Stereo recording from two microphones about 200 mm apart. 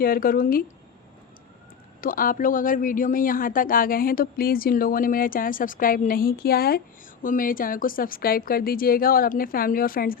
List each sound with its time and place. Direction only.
0.0 s speech: 45° left (ahead or behind)
2.0 s speech: 45° left (ahead or behind)